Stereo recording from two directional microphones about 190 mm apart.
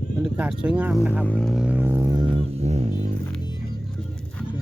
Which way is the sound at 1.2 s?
5° left (ahead or behind).